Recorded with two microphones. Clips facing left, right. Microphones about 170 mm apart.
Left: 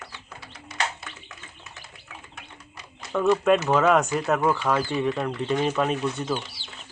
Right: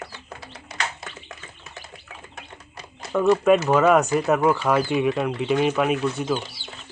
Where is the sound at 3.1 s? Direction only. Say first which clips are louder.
Right 3 dB; 5° right (ahead or behind).